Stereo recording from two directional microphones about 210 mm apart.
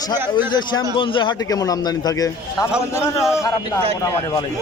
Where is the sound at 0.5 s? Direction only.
20° left (ahead or behind).